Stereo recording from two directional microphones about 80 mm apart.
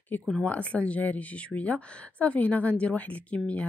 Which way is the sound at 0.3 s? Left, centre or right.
Centre.